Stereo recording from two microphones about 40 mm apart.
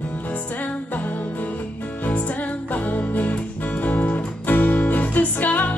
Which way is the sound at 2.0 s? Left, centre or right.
Left.